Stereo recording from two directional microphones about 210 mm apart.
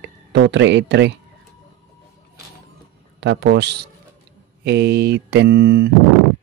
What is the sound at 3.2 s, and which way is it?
Speech, 55° right (ahead or behind).